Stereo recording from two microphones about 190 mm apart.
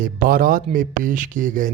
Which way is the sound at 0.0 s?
50° right (ahead or behind).